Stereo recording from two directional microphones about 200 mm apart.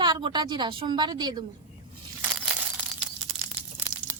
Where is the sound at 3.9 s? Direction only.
15° right (ahead or behind).